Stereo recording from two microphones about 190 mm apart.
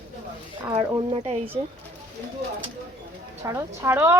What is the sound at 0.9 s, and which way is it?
Speech, 30° right (ahead or behind).